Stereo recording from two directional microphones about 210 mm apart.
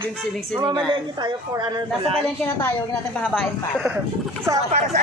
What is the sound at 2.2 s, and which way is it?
A woman's voice, 10° left (ahead or behind).